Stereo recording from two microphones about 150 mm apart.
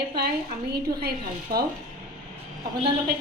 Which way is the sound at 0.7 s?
90° right.